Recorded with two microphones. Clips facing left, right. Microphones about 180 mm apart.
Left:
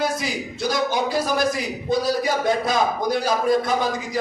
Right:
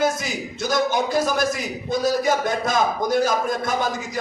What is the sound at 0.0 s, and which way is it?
A man's voice, 45° right (ahead or behind).